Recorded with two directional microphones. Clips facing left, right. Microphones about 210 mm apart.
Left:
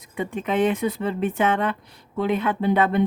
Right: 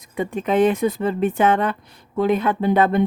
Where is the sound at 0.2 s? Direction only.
40° right (ahead or behind).